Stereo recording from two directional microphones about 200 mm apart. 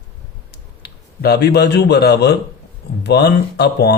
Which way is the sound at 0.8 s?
55° left (ahead or behind).